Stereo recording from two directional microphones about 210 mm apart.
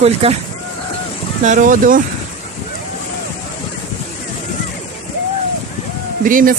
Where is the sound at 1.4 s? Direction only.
35° right (ahead or behind).